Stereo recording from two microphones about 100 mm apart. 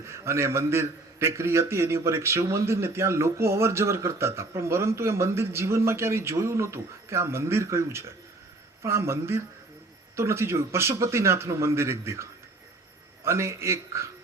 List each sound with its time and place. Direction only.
0.0 s a man's voice: 25° right (ahead or behind)